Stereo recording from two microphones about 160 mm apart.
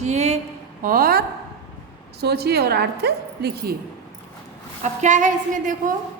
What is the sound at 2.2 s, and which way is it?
A woman's voice, 85° right.